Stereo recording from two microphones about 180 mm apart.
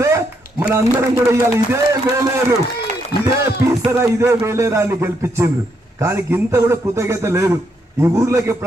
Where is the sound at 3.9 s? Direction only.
15° right (ahead or behind).